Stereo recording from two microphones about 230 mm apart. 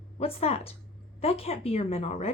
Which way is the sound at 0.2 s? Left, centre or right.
Left.